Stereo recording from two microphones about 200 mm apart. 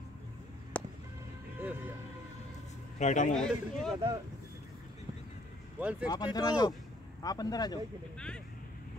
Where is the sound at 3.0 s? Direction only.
35° left (ahead or behind).